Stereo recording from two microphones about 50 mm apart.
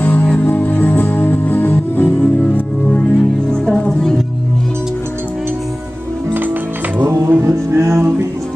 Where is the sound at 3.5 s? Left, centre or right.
Centre.